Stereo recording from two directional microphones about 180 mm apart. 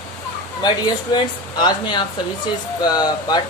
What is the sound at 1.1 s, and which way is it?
Speech, 25° left (ahead or behind).